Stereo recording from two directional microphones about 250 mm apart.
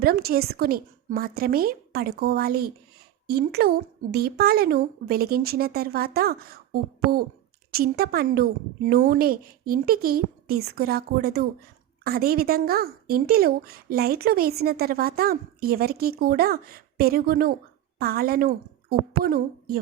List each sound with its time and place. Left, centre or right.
0.0 s a woman's voice: right